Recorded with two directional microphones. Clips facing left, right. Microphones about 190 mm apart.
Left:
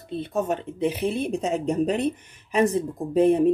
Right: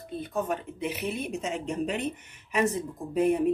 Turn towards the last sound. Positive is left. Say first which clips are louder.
# left 6 dB
turn(degrees=30)  # may be behind; listen again after turning